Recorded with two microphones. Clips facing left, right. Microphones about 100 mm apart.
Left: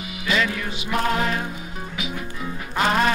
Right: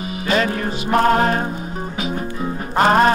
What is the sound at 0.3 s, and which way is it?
Music, 40° right (ahead or behind).